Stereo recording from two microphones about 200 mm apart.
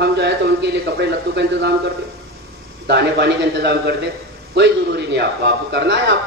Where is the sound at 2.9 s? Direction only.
55° right (ahead or behind).